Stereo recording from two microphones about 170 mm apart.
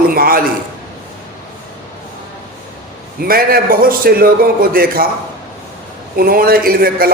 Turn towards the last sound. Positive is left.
turn(degrees=-60)  # may be behind; listen again after turning